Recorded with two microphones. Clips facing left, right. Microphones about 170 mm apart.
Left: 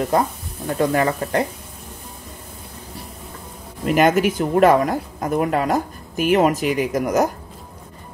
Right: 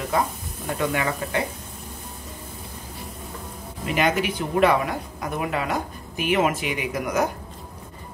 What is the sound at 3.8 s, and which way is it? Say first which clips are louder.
Speech: left 7 dB; 45° left (ahead or behind).